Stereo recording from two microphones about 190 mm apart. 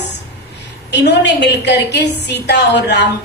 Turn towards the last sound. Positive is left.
turn(degrees=65)  # may be behind; listen again after turning